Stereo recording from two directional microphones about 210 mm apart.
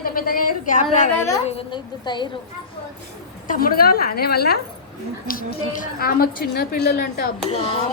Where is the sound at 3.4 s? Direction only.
45° left (ahead or behind).